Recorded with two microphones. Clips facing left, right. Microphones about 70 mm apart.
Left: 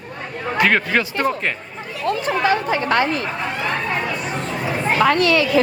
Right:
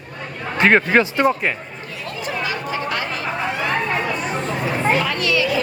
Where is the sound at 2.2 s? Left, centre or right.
Left.